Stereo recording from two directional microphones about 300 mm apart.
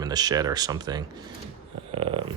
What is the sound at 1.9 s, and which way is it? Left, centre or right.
Dog, centre.